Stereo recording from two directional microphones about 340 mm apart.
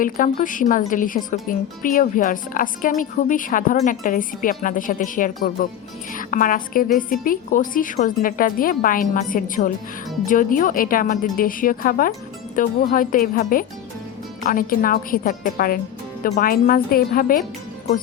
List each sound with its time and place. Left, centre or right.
0.0 s speech: left